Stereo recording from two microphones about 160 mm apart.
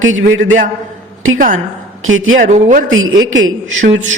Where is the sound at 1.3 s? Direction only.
55° right (ahead or behind).